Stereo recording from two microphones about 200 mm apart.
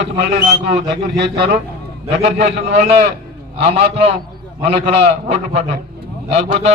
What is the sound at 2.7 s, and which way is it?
A man's voice, 30° right (ahead or behind).